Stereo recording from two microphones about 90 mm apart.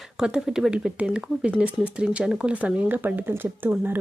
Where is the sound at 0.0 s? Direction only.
10° right (ahead or behind).